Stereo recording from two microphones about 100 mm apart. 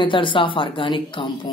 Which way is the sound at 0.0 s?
55° left (ahead or behind).